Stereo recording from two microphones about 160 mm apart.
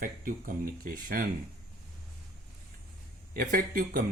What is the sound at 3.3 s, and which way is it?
Speech, 55° right (ahead or behind).